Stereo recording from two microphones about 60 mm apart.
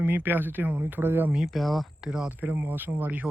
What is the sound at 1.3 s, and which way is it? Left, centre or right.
Speech, centre.